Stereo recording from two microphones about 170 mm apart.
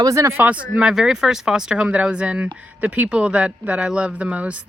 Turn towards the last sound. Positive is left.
turn(degrees=-10)  # may be behind; listen again after turning